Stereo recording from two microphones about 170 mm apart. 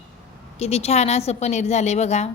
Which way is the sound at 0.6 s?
40° left (ahead or behind).